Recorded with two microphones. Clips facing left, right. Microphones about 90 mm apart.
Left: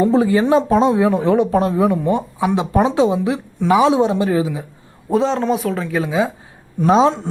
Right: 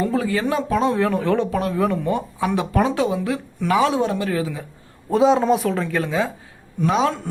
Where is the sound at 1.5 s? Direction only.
30° left (ahead or behind).